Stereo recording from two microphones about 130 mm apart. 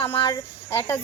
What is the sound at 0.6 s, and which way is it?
Speech, 20° left (ahead or behind).